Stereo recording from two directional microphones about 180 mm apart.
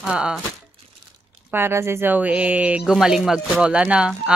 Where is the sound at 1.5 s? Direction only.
15° right (ahead or behind).